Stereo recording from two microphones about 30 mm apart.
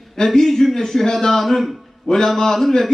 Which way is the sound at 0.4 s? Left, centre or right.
Centre.